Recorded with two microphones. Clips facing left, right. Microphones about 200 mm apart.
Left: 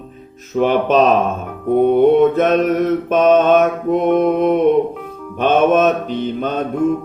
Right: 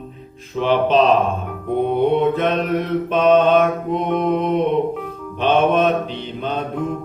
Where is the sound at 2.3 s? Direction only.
45° left (ahead or behind).